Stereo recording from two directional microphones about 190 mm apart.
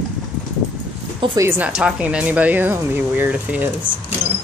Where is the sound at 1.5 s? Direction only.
5° right (ahead or behind).